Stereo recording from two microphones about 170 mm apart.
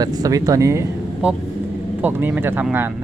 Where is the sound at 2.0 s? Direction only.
10° right (ahead or behind).